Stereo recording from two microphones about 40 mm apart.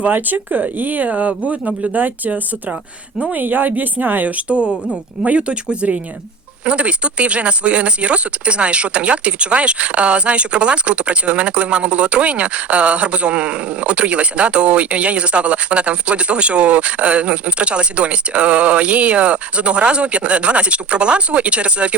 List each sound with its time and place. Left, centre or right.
0.0 s speech: right
2.0 s speech: right
3.3 s speech: right